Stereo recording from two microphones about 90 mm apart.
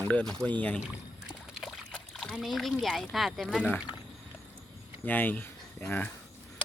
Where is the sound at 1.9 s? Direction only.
10° left (ahead or behind).